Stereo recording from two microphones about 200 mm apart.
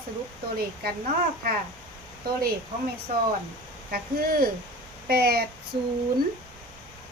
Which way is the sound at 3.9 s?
50° right (ahead or behind).